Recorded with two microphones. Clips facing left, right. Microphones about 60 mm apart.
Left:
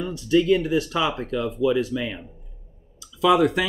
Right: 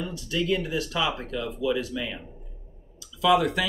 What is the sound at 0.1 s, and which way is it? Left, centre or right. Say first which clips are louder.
Speech: left 10 dB; left.